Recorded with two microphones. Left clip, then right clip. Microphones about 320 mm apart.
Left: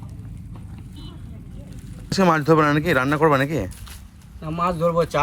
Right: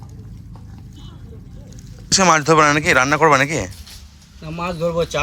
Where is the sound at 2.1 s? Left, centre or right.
Centre.